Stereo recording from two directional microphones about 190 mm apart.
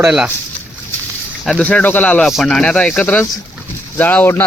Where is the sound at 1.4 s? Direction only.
5° left (ahead or behind).